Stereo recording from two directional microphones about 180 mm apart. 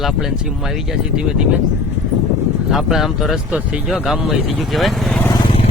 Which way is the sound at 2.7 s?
Centre (ahead or behind).